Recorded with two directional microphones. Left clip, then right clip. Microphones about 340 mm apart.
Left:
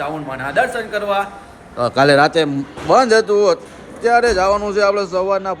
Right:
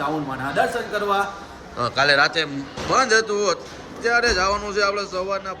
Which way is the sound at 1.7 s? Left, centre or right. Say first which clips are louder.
Left 5 dB; centre.